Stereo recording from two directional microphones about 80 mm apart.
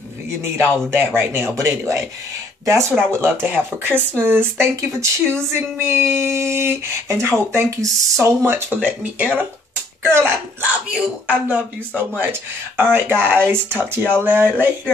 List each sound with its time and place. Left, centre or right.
0.4 s speech: right
3.9 s speech: centre
4.3 s speech: right
8.7 s speech: centre
10.0 s speech: right
10.6 s speech: centre